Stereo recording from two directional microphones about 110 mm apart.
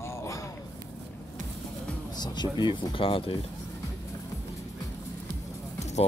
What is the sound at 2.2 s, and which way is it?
Speech, 40° left (ahead or behind).